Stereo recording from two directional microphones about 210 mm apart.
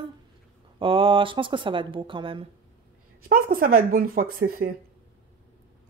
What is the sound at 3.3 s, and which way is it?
Speech, 45° right (ahead or behind).